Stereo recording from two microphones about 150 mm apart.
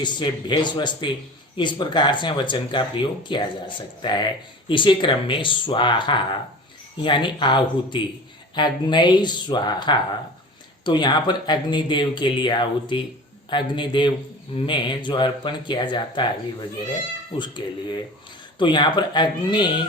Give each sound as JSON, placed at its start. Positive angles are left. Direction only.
{"t": 0.0, "sound": "speech", "side_deg": 30}
{"t": 17.3, "sound": "speech", "side_deg": 30}